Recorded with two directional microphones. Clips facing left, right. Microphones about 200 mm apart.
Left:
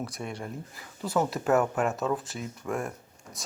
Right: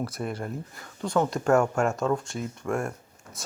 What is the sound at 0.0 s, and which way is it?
Speech, centre (ahead or behind).